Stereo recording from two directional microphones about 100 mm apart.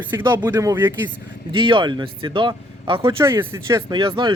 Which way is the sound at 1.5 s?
55° right (ahead or behind).